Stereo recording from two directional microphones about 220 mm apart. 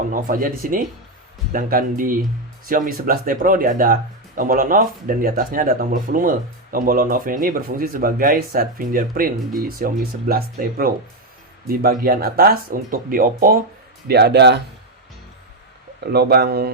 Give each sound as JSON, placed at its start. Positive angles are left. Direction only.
{"t": 0.1, "sound": "speech", "side_deg": -40}
{"t": 16.1, "sound": "speech", "side_deg": -45}